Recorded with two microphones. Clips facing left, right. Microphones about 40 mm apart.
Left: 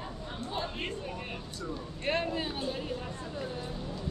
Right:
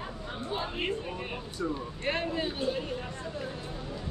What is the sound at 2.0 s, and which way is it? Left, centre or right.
Speech, centre.